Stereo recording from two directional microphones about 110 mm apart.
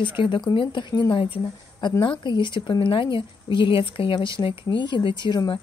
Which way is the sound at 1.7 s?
40° left (ahead or behind).